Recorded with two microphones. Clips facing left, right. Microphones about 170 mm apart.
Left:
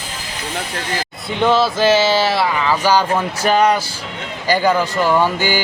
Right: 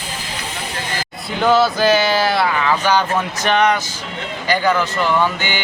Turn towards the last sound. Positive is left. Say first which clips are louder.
# left 5 dB
turn(degrees=40)  # may be behind; listen again after turning